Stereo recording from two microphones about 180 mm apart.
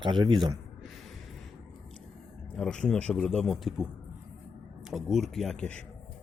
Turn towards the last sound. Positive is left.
turn(degrees=5)  # may be behind; listen again after turning